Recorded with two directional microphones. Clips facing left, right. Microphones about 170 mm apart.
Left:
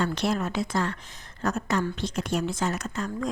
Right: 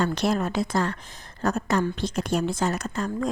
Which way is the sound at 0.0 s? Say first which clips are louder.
Right 2 dB; 40° right (ahead or behind).